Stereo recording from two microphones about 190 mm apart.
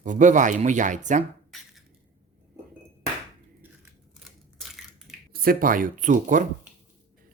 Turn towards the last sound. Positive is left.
turn(degrees=-40)  # may be behind; listen again after turning